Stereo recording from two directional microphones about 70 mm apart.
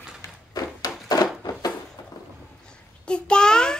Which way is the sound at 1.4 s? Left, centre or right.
Left.